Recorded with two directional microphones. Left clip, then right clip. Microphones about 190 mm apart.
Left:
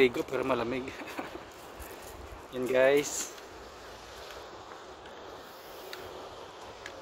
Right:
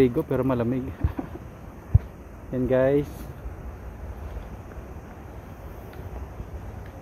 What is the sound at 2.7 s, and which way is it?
Speech, 10° left (ahead or behind).